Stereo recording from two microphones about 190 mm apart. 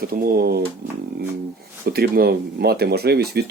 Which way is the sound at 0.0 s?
50° right (ahead or behind).